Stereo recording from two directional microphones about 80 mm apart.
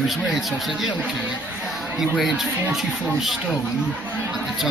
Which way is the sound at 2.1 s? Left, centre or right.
Centre.